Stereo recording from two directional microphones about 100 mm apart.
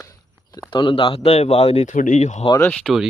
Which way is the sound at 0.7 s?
55° left (ahead or behind).